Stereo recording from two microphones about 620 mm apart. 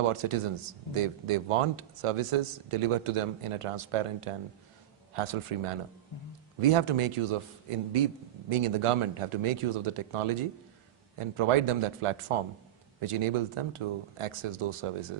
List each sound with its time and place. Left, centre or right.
0.0 s speech: right